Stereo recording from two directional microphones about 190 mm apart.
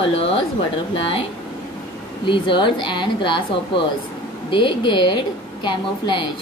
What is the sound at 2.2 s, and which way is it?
A woman's voice, 25° left (ahead or behind).